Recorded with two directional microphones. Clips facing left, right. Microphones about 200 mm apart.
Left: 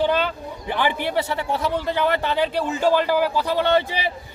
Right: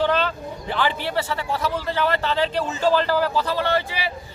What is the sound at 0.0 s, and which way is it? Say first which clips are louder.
A man's voice: left 1 dB; 10° left (ahead or behind).